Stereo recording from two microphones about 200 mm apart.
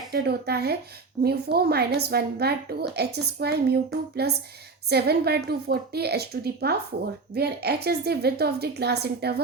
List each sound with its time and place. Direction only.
0.1 s a woman's voice: 50° right (ahead or behind)